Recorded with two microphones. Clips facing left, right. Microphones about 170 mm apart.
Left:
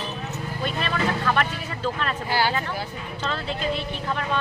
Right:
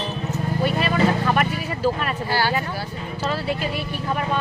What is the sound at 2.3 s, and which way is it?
Speech, 15° left (ahead or behind).